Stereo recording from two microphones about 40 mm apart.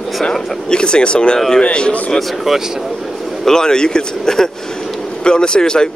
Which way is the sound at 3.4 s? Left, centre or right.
Centre.